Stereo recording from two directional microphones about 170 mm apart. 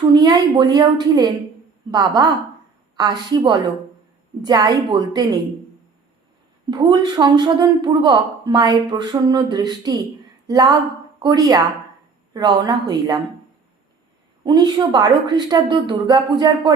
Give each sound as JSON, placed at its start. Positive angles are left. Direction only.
{"t": 0.1, "sound": "a woman's voice", "side_deg": -25}
{"t": 6.7, "sound": "a woman's voice", "side_deg": -25}
{"t": 14.4, "sound": "a woman's voice", "side_deg": -25}